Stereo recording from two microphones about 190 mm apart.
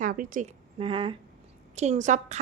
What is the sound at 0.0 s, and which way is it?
Speech, 45° right (ahead or behind).